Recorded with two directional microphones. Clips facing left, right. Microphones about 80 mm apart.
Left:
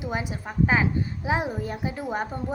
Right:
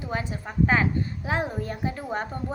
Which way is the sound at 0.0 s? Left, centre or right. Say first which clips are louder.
Left 1 dB; centre.